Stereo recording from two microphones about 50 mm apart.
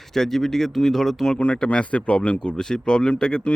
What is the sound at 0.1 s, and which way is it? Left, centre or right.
Speech, centre.